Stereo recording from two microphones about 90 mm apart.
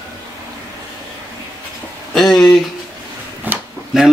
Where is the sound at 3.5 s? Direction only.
20° right (ahead or behind).